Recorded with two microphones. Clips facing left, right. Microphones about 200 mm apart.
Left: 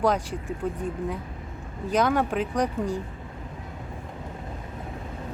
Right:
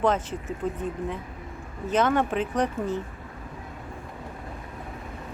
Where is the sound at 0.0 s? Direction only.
10° left (ahead or behind).